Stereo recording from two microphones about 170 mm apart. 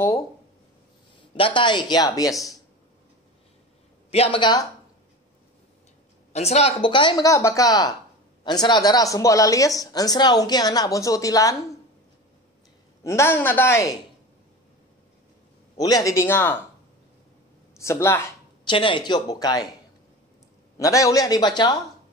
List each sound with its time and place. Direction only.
1.3 s speech: 30° left (ahead or behind)
4.1 s speech: 35° left (ahead or behind)
6.3 s speech: 40° left (ahead or behind); by 11.5 s 20° left (ahead or behind)
13.0 s a man's voice: 15° left (ahead or behind)
15.7 s a man's voice: 20° left (ahead or behind)
17.7 s a man's voice: 15° left (ahead or behind)
18.7 s speech: 30° left (ahead or behind)
20.7 s speech: 20° left (ahead or behind)